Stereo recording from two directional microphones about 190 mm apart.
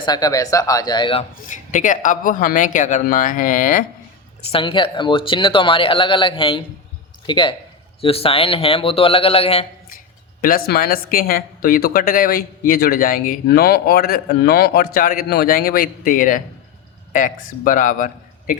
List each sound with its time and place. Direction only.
0.0 s speech: 20° left (ahead or behind)
1.5 s speech: 40° left (ahead or behind)
4.5 s speech: 25° left (ahead or behind)
10.4 s a man's voice: 50° left (ahead or behind)